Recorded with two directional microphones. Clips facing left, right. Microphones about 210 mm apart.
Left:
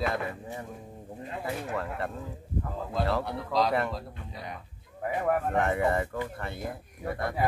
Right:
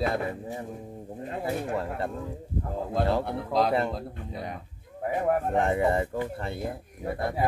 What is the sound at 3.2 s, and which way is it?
Speech, 55° right (ahead or behind).